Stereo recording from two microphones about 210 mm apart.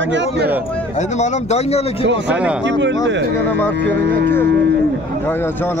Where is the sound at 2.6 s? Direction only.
60° right (ahead or behind).